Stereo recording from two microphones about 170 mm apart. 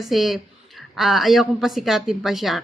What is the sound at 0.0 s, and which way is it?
A woman's voice, centre (ahead or behind).